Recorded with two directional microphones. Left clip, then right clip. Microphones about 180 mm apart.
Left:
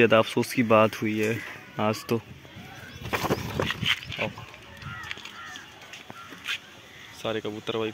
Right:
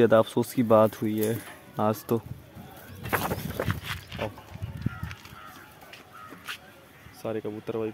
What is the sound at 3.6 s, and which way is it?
Dog, 5° left (ahead or behind).